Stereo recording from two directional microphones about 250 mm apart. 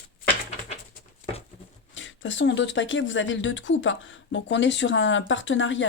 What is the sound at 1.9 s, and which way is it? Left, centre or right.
Speech, left.